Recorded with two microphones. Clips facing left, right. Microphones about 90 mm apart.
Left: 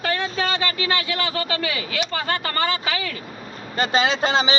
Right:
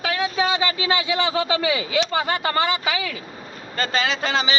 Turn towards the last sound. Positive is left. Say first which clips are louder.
# left 3 dB
turn(degrees=25)  # may be behind; listen again after turning